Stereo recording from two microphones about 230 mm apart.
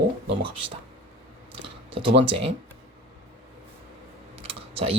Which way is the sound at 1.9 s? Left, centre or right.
Right.